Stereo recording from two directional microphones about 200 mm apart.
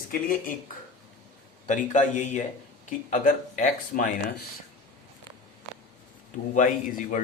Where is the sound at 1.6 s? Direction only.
35° left (ahead or behind).